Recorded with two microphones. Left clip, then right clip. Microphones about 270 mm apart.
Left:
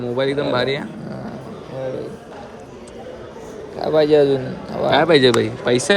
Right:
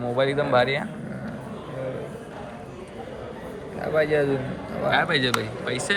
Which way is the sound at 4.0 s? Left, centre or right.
Left.